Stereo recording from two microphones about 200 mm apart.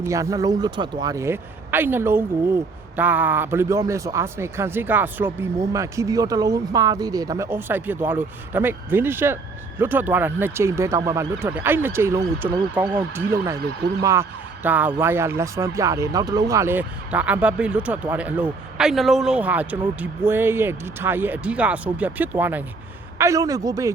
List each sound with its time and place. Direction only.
0.0 s a man's voice: 15° right (ahead or behind)